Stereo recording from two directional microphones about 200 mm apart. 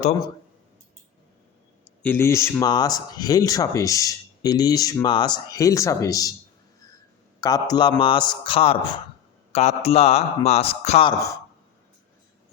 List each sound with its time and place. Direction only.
2.0 s speech: 10° left (ahead or behind)
7.4 s a man's voice: 20° left (ahead or behind)